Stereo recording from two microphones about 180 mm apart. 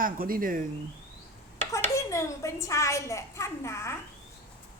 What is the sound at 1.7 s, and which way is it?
A woman's voice, 15° left (ahead or behind).